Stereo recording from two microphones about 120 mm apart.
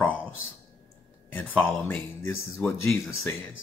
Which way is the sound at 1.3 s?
15° left (ahead or behind).